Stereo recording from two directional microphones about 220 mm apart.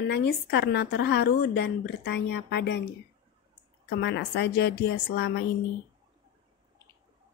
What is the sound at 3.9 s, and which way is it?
A woman's voice, 50° left (ahead or behind).